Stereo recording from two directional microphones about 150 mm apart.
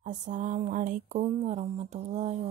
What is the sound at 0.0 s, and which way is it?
Music, 55° right (ahead or behind).